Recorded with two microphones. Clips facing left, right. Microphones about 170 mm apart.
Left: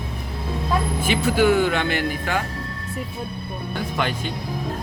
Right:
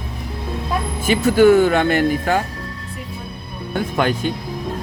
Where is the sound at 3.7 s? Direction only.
50° right (ahead or behind).